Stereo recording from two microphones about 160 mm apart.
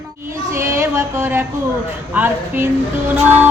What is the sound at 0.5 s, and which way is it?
A woman's voice, 15° right (ahead or behind).